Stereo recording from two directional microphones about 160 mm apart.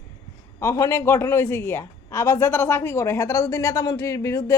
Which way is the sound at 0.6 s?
20° left (ahead or behind).